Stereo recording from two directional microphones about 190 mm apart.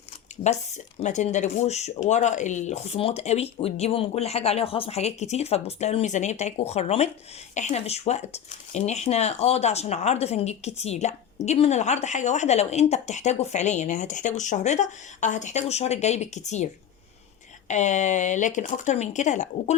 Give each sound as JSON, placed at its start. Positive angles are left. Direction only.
{"t": 0.4, "sound": "speech", "side_deg": 35}
{"t": 17.7, "sound": "speech", "side_deg": 40}